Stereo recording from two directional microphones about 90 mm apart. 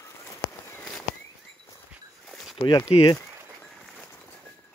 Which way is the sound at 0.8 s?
10° left (ahead or behind).